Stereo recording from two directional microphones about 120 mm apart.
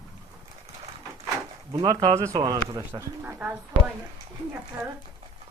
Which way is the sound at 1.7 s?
35° right (ahead or behind).